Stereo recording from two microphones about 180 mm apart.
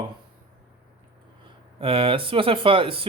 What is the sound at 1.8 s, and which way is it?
Speech, 30° right (ahead or behind).